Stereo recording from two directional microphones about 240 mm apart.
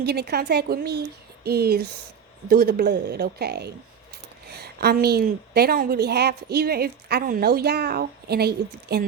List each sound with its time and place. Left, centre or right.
0.0 s a woman's voice: right